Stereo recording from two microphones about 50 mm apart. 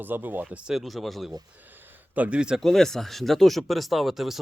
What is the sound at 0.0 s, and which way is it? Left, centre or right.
Speech, right.